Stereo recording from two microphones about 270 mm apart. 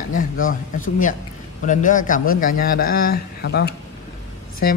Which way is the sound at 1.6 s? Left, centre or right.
Left.